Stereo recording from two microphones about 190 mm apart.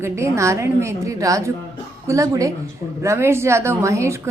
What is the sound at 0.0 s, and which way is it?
A woman's voice, 15° right (ahead or behind).